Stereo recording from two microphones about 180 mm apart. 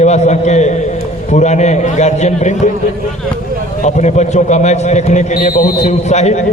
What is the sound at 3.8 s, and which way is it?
A man's voice, 40° left (ahead or behind).